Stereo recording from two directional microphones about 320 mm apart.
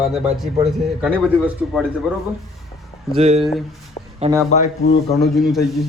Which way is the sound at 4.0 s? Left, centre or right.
Centre.